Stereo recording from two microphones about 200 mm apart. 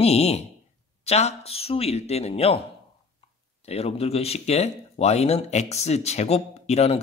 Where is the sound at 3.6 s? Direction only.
30° left (ahead or behind).